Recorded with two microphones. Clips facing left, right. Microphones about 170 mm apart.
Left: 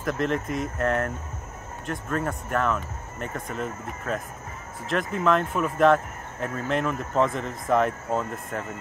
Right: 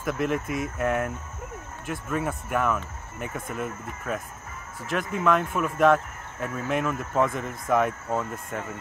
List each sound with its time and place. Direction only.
0.0 s speech: 5° right (ahead or behind)